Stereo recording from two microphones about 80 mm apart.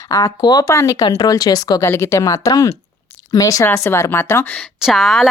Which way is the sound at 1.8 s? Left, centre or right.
Left.